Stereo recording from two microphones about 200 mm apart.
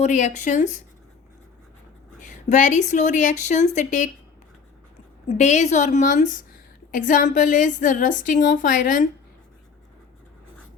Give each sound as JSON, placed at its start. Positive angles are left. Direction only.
{"t": 0.0, "sound": "a woman's voice", "side_deg": 35}
{"t": 2.2, "sound": "a woman's voice", "side_deg": 40}
{"t": 5.4, "sound": "a woman's voice", "side_deg": 35}